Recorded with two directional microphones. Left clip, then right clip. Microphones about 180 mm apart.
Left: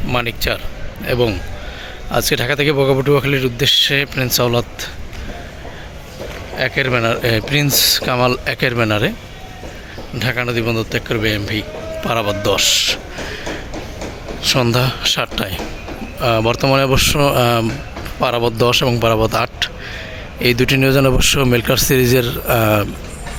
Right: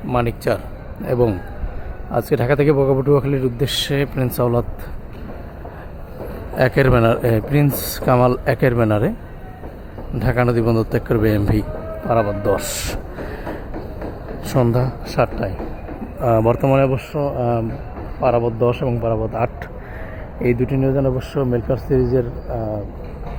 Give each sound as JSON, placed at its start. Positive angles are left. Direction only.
{"t": 0.1, "sound": "a man's voice", "side_deg": -10}
{"t": 6.6, "sound": "a man's voice", "side_deg": -25}
{"t": 10.2, "sound": "a man's voice", "side_deg": -15}
{"t": 12.0, "sound": "speech", "side_deg": 0}
{"t": 12.5, "sound": "a man's voice", "side_deg": -15}
{"t": 14.4, "sound": "a man's voice", "side_deg": -15}
{"t": 14.7, "sound": "speech", "side_deg": 0}
{"t": 19.4, "sound": "a man's voice", "side_deg": -10}
{"t": 20.6, "sound": "speech", "side_deg": 10}